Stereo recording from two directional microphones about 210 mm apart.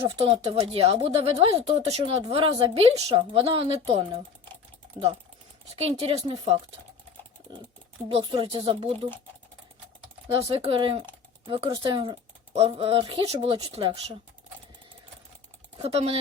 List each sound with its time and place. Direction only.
0.2 s speech: 30° right (ahead or behind)
5.7 s speech: 30° right (ahead or behind)
8.1 s speech: 25° right (ahead or behind)
10.3 s speech: 25° right (ahead or behind)
15.8 s speech: 30° right (ahead or behind)